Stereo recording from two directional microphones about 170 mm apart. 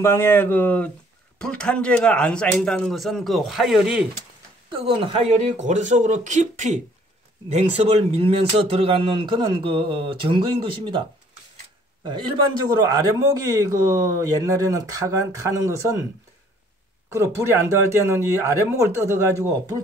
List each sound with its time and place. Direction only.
0.0 s a man's voice: 15° left (ahead or behind); by 4.0 s 5° right (ahead or behind)
4.6 s a man's voice: 35° right (ahead or behind)
13.6 s speech: 20° right (ahead or behind)
17.1 s speech: 15° right (ahead or behind)